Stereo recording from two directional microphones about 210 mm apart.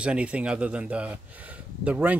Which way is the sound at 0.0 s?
5° right (ahead or behind).